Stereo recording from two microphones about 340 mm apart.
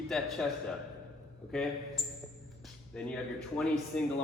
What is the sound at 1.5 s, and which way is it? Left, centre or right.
Speech, centre.